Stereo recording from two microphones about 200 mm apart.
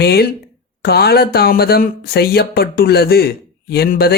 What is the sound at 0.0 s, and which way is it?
Speech, 55° left (ahead or behind).